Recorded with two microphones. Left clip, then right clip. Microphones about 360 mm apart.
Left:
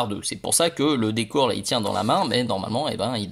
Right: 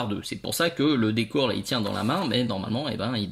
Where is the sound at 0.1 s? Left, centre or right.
Centre.